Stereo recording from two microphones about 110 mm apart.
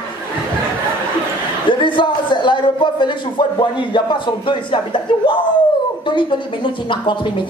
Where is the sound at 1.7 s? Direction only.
45° left (ahead or behind).